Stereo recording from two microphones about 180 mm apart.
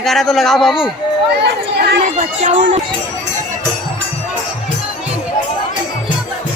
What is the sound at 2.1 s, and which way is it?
Speech, 45° right (ahead or behind).